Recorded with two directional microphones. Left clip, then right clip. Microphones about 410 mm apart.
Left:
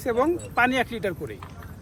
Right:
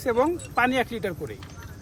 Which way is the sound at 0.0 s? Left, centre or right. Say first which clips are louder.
Even; centre.